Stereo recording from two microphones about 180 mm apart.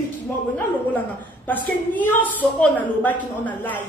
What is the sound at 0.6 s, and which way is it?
A woman's voice, 10° left (ahead or behind).